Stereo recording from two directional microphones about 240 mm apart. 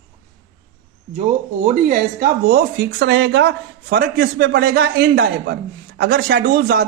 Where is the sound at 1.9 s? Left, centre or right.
Right.